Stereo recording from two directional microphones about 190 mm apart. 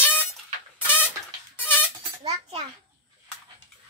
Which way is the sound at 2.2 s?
25° right (ahead or behind).